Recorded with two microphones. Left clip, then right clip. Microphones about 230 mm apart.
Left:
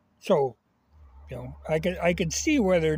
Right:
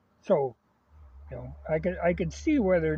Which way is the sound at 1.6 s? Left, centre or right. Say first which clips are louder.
Left 2 dB; left.